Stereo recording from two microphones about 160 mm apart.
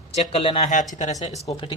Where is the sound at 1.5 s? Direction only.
35° left (ahead or behind).